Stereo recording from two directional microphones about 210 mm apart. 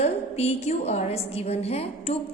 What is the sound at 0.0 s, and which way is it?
A woman's voice, 30° left (ahead or behind).